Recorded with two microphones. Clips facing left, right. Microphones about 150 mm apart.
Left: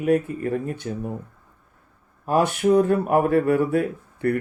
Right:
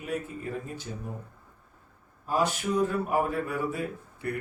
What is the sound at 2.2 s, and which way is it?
Speech, 60° left (ahead or behind).